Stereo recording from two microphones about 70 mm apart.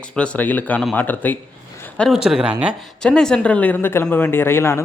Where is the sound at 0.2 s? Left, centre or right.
Left.